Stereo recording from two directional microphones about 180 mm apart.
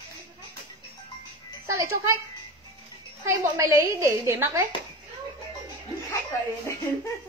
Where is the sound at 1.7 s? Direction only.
15° right (ahead or behind).